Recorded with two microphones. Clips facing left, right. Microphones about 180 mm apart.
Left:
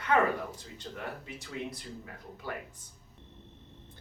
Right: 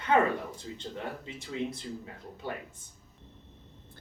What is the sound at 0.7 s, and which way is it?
Speech, 25° right (ahead or behind).